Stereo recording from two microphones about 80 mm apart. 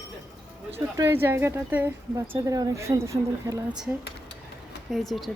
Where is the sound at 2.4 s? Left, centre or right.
Right.